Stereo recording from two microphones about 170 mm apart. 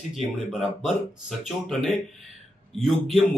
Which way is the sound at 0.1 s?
Centre (ahead or behind).